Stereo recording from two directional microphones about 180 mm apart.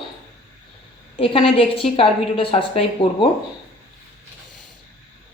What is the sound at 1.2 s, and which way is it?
A woman's voice, 30° left (ahead or behind).